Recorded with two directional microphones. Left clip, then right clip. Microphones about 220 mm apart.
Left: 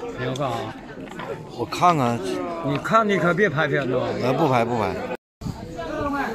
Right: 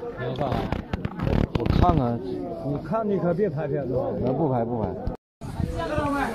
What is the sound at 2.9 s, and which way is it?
Speech, 40° left (ahead or behind).